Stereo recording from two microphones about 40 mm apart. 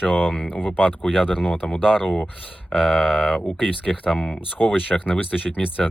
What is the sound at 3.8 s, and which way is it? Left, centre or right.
Speech, left.